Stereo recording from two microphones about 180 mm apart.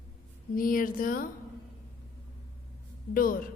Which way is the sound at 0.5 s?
50° left (ahead or behind).